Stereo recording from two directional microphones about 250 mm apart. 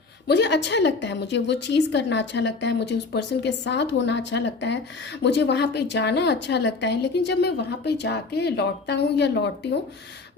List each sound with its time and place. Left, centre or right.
0.3 s a woman's voice: left